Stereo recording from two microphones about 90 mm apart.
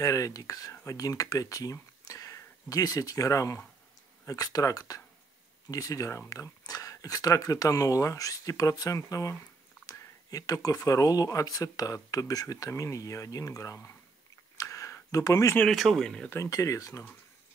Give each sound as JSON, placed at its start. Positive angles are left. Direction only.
{"t": 0.0, "sound": "speech", "side_deg": 40}
{"t": 14.6, "sound": "a sound", "side_deg": 40}
{"t": 15.7, "sound": "speech", "side_deg": 0}
{"t": 16.4, "sound": "speech", "side_deg": 40}